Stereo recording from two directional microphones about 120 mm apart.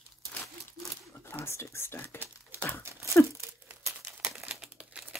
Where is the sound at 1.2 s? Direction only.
20° left (ahead or behind).